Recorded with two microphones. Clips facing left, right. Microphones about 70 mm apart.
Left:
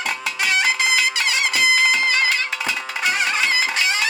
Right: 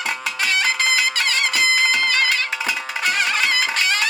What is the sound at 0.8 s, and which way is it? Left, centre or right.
Music, right.